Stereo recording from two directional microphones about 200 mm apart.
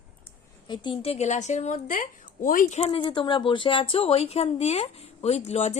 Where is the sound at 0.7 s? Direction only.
25° left (ahead or behind).